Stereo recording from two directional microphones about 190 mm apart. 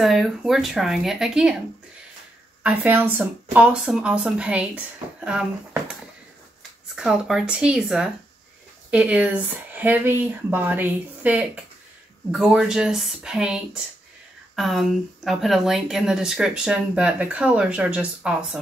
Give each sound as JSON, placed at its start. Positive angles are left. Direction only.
{"t": 0.0, "sound": "a woman's voice", "side_deg": 0}
{"t": 2.6, "sound": "a woman's voice", "side_deg": -10}
{"t": 7.0, "sound": "a woman's voice", "side_deg": -5}